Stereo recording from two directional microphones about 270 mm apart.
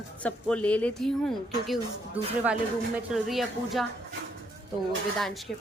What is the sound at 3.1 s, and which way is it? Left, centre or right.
Speech, centre.